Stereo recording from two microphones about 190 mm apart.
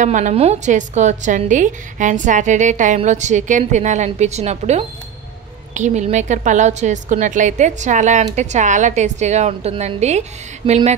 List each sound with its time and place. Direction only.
0.0 s a woman's voice: 40° right (ahead or behind)